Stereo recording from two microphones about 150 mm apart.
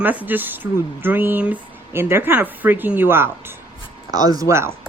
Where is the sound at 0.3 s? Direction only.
15° right (ahead or behind).